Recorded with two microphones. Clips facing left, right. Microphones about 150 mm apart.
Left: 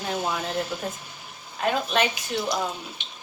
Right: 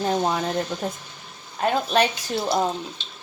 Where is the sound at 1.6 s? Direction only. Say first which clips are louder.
Right 3 dB; 35° right (ahead or behind).